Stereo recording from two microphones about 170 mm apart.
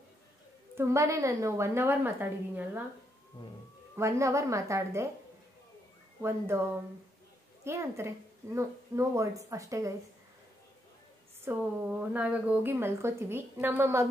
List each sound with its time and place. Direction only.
0.7 s a woman's voice: 15° right (ahead or behind)
3.9 s a woman's voice: 15° right (ahead or behind)
6.2 s a woman's voice: 15° right (ahead or behind)
11.5 s a woman's voice: 15° right (ahead or behind)